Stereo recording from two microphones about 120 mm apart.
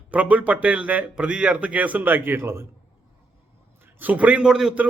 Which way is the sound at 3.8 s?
15° right (ahead or behind).